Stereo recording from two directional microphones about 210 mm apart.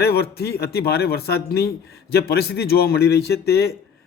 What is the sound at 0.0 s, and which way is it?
Speech, 50° left (ahead or behind).